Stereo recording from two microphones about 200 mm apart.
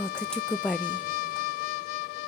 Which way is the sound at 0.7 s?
45° left (ahead or behind).